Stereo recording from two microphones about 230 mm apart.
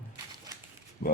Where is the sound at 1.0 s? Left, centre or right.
Left.